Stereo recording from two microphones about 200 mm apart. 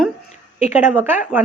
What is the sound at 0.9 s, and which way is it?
Speech, 10° right (ahead or behind).